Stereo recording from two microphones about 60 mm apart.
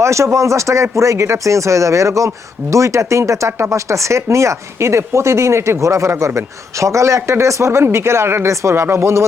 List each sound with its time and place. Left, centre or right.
0.0 s speech: right
7.2 s speech: right